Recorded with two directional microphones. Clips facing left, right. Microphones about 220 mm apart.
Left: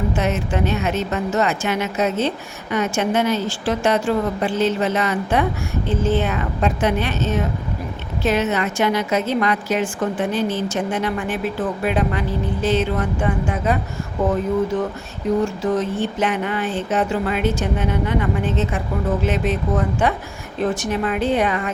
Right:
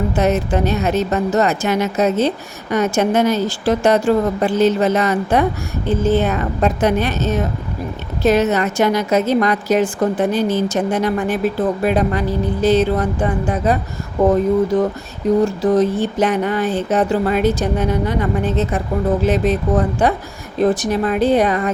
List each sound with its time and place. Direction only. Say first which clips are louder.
0.2 s speech: right 8 dB; 40° right (ahead or behind)